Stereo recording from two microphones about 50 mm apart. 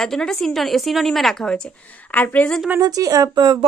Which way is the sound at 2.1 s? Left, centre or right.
Left.